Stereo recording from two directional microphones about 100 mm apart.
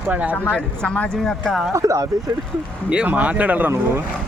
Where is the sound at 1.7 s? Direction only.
35° right (ahead or behind).